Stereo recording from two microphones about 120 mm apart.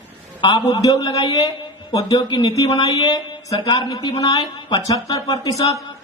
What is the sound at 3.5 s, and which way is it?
Speech, 45° left (ahead or behind).